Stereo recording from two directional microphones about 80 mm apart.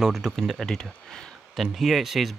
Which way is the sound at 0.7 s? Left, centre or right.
Centre.